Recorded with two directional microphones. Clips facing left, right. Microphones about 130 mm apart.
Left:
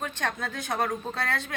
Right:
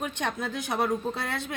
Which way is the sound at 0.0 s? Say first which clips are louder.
Right 1 dB; 15° right (ahead or behind).